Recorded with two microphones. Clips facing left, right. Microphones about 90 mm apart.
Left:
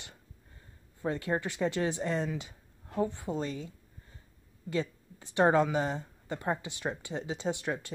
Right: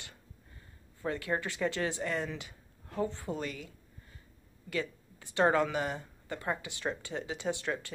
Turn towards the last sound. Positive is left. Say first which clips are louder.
# left 1 dB
turn(degrees=20)  # may be behind; listen again after turning